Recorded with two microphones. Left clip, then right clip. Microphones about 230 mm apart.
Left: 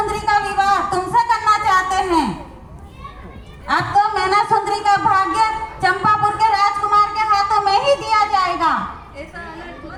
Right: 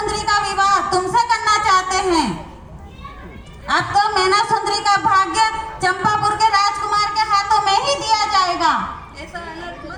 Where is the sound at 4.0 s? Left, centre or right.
Right.